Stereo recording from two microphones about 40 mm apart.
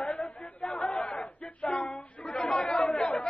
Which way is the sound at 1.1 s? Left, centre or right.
Left.